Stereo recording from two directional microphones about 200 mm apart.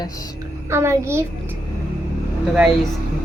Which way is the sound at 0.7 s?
15° right (ahead or behind).